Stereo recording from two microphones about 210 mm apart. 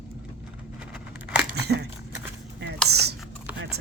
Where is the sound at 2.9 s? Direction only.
50° right (ahead or behind).